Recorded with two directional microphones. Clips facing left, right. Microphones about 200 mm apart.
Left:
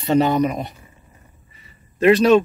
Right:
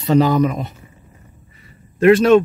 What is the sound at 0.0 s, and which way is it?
Speech, 25° left (ahead or behind).